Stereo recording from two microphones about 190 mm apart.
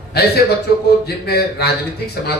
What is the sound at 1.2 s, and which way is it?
Speech, 55° left (ahead or behind).